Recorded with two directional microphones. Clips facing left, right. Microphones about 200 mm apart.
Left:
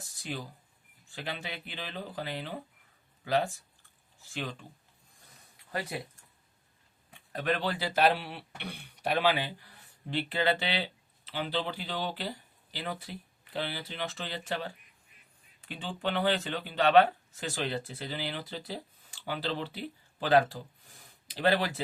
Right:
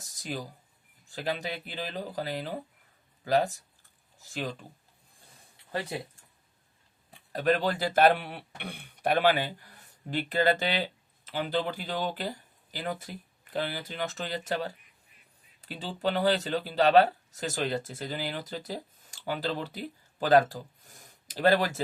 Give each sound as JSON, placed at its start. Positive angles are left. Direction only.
{"t": 0.2, "sound": "speech", "side_deg": -40}
{"t": 5.9, "sound": "speech", "side_deg": -30}
{"t": 7.1, "sound": "speech", "side_deg": -40}